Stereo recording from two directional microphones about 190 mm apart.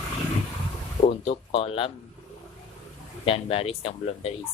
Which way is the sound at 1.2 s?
30° left (ahead or behind).